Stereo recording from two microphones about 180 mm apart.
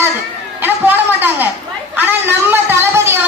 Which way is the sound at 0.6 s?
10° right (ahead or behind).